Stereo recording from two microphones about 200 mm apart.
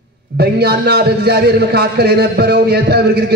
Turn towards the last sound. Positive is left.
turn(degrees=-55)  # may be behind; listen again after turning